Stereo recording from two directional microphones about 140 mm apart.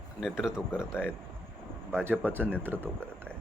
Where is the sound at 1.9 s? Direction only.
15° right (ahead or behind).